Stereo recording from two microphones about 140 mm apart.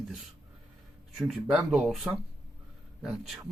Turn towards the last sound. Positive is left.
turn(degrees=0)  # may be behind; listen again after turning